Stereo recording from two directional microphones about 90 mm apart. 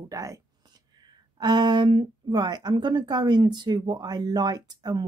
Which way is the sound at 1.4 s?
50° right (ahead or behind).